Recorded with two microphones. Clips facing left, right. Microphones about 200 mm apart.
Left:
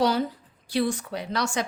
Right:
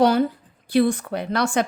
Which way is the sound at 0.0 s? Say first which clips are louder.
Right 6 dB; 55° right (ahead or behind).